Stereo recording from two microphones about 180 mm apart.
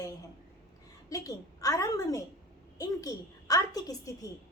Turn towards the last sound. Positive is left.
turn(degrees=20)  # may be behind; listen again after turning